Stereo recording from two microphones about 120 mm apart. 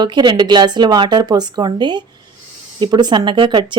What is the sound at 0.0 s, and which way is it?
Speech, 35° right (ahead or behind).